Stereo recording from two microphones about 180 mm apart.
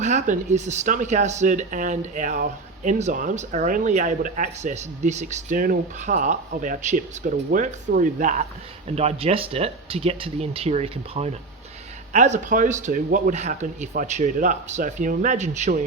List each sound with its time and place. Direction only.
0.0 s speech: 40° right (ahead or behind)
9.0 s speech: 35° right (ahead or behind)